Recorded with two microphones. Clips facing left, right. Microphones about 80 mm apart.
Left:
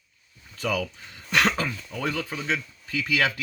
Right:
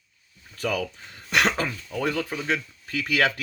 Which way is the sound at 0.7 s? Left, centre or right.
Right.